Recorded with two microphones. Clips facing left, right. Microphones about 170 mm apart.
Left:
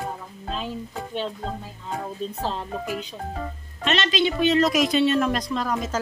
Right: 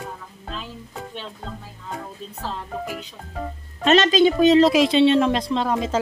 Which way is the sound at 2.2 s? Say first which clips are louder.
Left 7 dB; 10° right (ahead or behind).